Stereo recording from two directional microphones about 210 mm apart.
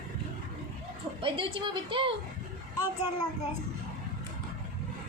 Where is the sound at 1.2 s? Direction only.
25° right (ahead or behind).